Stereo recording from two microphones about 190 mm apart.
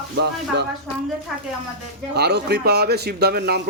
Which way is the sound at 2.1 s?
60° right (ahead or behind).